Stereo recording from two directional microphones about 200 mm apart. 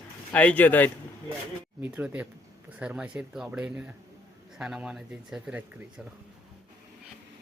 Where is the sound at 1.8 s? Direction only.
10° right (ahead or behind).